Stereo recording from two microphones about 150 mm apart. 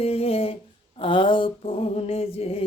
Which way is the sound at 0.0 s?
40° left (ahead or behind).